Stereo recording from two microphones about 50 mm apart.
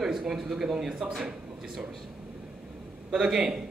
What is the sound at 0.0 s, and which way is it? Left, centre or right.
Speech, centre.